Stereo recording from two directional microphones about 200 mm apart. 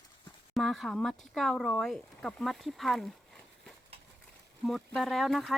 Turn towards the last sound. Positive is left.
turn(degrees=0)  # may be behind; listen again after turning